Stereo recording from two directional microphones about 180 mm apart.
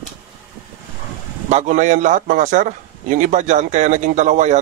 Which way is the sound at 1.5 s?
40° right (ahead or behind).